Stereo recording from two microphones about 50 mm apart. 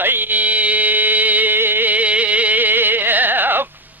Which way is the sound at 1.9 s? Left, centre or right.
Right.